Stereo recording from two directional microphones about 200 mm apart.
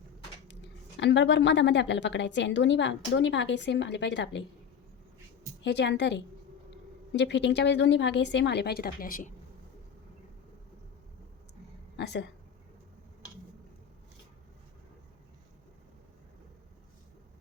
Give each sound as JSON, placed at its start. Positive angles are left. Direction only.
{"t": 0.9, "sound": "a woman's voice", "side_deg": 65}
{"t": 5.6, "sound": "a woman's voice", "side_deg": 60}
{"t": 11.9, "sound": "speech", "side_deg": 60}